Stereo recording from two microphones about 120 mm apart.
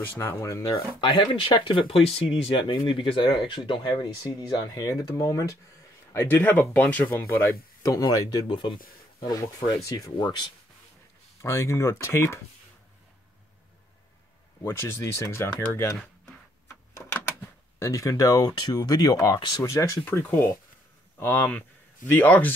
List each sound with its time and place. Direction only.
0.0 s speech: 20° left (ahead or behind)
1.0 s speech: 45° left (ahead or behind)
11.4 s speech: 25° left (ahead or behind)
14.6 s speech: 20° left (ahead or behind)
17.0 s a sound: 15° left (ahead or behind)
17.7 s speech: 25° left (ahead or behind)
20.1 s speech: 15° left (ahead or behind)